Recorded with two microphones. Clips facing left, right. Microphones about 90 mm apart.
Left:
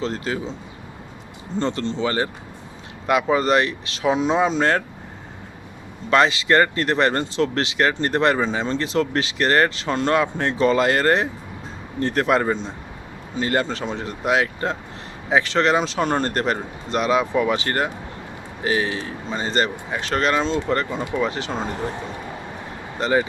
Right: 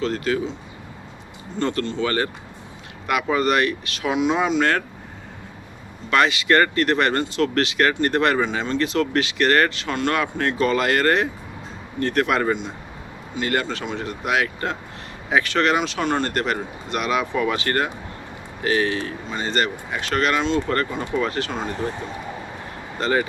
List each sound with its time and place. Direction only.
0.0 s speech: 30° left (ahead or behind)
1.5 s speech: 25° left (ahead or behind)
6.1 s speech: 30° left (ahead or behind)
20.7 s speech: 20° left (ahead or behind)
23.0 s speech: 20° left (ahead or behind)